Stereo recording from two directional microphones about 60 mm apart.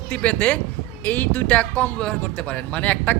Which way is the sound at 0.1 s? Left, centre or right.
Left.